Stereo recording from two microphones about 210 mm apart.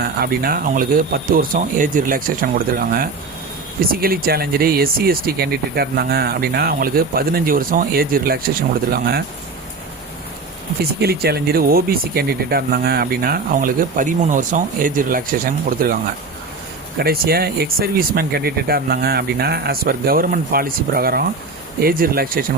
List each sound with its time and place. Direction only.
0.0 s speech: 45° right (ahead or behind)
11.0 s speech: 50° right (ahead or behind)
17.0 s speech: 45° right (ahead or behind)